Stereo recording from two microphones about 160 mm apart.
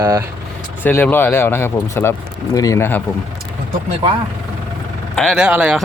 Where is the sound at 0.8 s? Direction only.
10° left (ahead or behind).